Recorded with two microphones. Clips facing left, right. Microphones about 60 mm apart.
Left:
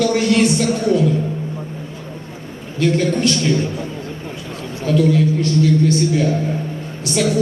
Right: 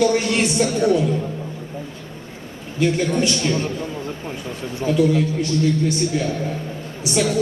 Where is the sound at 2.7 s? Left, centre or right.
Centre.